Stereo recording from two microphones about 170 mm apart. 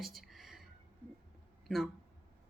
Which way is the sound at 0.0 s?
Centre (ahead or behind).